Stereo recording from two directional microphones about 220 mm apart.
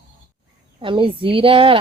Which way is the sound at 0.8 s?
25° right (ahead or behind).